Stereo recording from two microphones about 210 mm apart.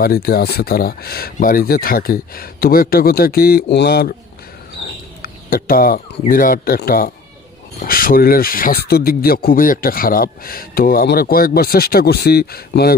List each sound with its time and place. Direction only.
0.0 s speech: 45° left (ahead or behind)
5.2 s speech: 45° left (ahead or behind)